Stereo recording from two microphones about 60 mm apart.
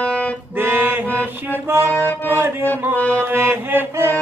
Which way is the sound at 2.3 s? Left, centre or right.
Right.